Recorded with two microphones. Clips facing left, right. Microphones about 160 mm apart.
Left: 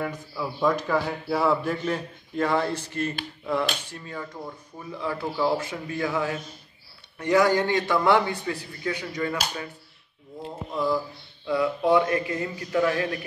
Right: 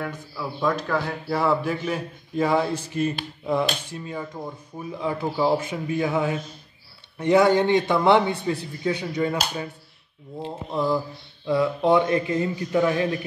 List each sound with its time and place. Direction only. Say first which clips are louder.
0.0 s a man's voice: left 1 dB; 5° left (ahead or behind); by 9.7 s 20° right (ahead or behind)
10.4 s mantra: right 2 dB; 30° right (ahead or behind)
11.4 s a man's voice: right 2 dB; 30° right (ahead or behind)